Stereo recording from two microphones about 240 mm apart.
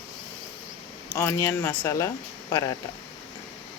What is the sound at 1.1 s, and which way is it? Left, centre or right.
Speech, centre.